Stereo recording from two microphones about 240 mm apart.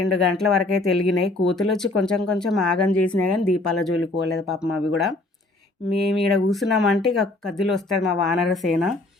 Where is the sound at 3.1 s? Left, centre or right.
Left.